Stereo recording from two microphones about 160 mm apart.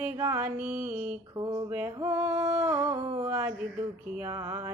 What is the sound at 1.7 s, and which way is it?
Music, 10° right (ahead or behind).